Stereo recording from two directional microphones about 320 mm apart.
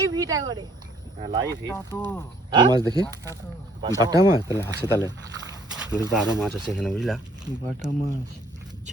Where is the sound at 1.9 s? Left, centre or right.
Centre.